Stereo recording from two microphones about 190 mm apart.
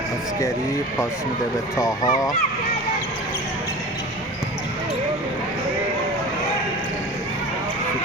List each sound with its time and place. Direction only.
1.8 s speech: 20° left (ahead or behind)